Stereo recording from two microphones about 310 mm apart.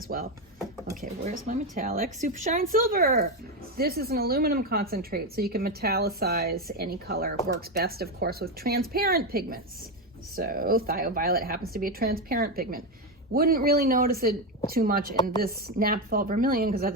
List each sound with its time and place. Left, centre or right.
0.1 s a woman's voice: right